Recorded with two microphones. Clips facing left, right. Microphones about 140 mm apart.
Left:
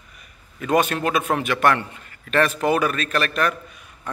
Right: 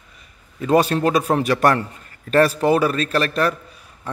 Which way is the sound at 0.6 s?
30° right (ahead or behind).